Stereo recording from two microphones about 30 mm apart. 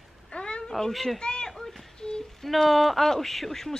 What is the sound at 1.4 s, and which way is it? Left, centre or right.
Children playing, centre.